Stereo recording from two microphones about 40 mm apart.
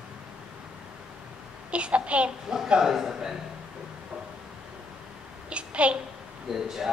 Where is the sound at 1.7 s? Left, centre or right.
Right.